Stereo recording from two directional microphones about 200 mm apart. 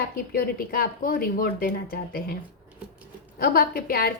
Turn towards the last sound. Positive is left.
turn(degrees=50)  # may be behind; listen again after turning